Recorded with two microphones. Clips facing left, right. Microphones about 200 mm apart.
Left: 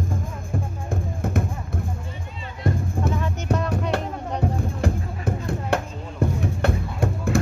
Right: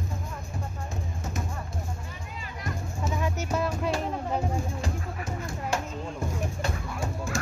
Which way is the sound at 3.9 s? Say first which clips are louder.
Left 2 dB; 65° left (ahead or behind).